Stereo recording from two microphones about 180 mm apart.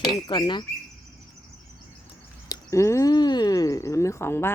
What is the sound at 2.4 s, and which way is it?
Speech, 20° left (ahead or behind).